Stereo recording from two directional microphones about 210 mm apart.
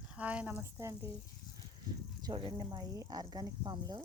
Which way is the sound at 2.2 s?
20° right (ahead or behind).